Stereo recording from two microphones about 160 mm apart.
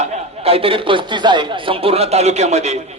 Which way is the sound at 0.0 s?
40° right (ahead or behind).